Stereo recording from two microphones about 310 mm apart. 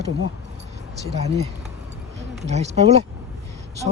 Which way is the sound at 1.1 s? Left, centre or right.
Right.